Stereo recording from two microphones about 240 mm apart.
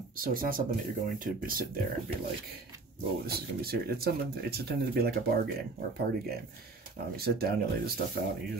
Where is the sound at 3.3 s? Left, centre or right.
Right.